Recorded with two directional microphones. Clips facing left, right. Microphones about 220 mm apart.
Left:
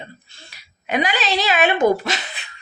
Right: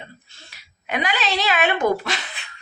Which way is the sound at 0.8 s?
35° left (ahead or behind).